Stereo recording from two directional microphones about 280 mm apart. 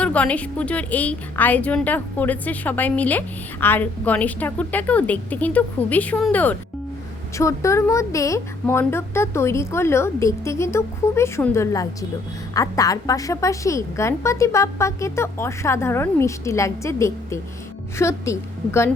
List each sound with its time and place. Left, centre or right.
0.0 s a woman's voice: centre